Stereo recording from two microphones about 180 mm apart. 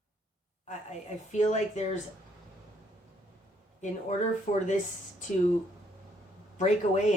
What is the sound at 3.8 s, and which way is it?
Speech, 40° left (ahead or behind).